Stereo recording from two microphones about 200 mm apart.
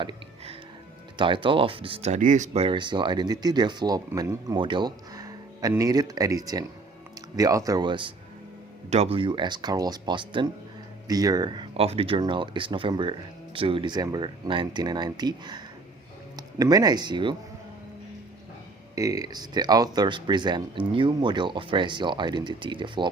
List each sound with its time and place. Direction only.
0.0 s music: 25° right (ahead or behind)
1.2 s speech: 25° right (ahead or behind)
18.9 s speech: 15° right (ahead or behind)